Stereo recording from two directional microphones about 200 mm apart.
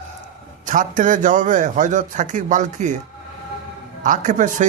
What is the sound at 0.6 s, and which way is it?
A man's voice, 40° right (ahead or behind).